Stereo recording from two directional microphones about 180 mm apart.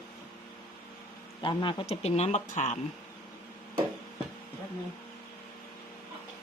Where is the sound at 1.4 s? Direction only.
25° left (ahead or behind).